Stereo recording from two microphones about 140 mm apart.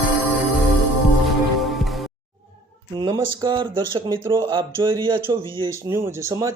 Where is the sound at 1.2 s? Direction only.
Centre (ahead or behind).